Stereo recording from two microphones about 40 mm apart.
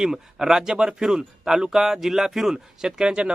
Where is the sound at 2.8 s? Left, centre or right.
Right.